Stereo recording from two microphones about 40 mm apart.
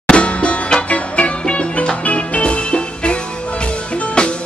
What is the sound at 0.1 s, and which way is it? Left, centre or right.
Music, left.